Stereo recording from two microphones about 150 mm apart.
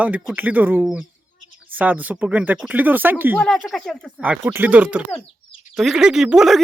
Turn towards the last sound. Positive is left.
turn(degrees=-5)  # may be behind; listen again after turning